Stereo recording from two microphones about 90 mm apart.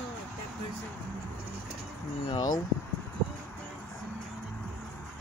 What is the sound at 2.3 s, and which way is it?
Speech, 50° left (ahead or behind).